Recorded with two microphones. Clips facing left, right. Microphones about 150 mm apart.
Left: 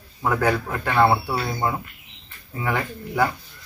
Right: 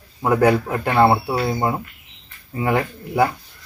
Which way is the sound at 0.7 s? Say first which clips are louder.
Right 3 dB; 30° right (ahead or behind).